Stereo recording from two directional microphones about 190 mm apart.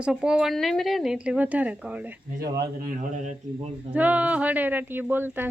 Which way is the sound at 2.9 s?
40° right (ahead or behind).